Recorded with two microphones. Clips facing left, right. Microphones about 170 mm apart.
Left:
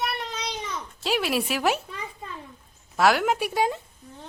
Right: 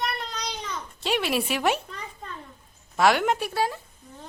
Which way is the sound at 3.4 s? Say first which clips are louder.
Left 2 dB; 15° left (ahead or behind).